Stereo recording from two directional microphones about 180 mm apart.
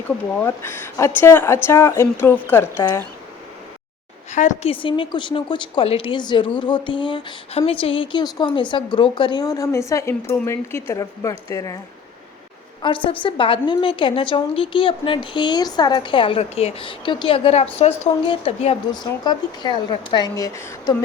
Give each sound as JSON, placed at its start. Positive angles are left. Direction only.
{"t": 0.3, "sound": "a woman's voice", "side_deg": 15}
{"t": 4.3, "sound": "a woman's voice", "side_deg": 40}
{"t": 4.7, "sound": "a woman's voice", "side_deg": 30}
{"t": 12.8, "sound": "a woman's voice", "side_deg": 30}